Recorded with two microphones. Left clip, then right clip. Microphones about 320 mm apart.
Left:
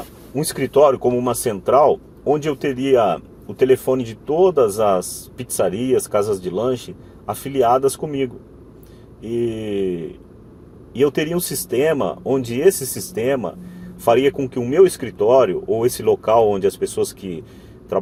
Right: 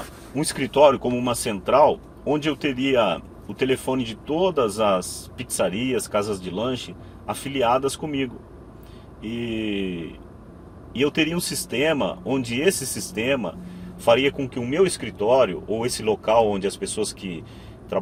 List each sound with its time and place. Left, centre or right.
1.0 s speech: left